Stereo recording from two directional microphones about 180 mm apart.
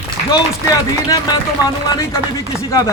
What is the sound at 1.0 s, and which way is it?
Speech, 20° left (ahead or behind).